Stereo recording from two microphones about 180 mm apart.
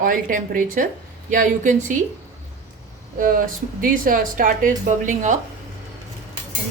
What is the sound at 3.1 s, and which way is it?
Speech, 50° right (ahead or behind).